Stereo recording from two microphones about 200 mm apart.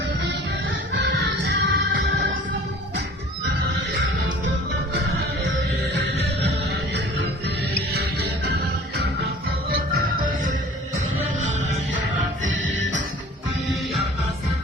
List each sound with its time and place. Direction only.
0.9 s music: 60° right (ahead or behind)
7.9 s music: 55° right (ahead or behind)
9.6 s music: 45° right (ahead or behind)
12.5 s music: 70° right (ahead or behind)